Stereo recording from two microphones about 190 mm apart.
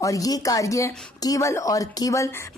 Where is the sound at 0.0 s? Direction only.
20° left (ahead or behind).